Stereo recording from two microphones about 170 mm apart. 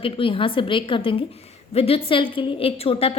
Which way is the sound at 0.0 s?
30° left (ahead or behind).